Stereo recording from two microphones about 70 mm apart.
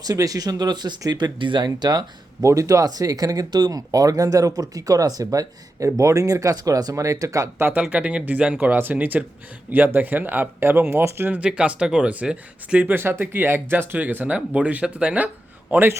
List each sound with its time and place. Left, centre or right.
0.0 s speech: right
2.4 s speech: right
7.8 s speech: centre; by 11.3 s right
11.3 s speech: centre
12.9 s speech: right